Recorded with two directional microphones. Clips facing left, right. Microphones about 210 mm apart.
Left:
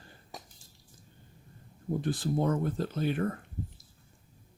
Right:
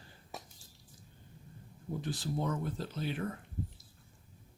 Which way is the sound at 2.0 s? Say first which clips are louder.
Left 6 dB; 55° left (ahead or behind).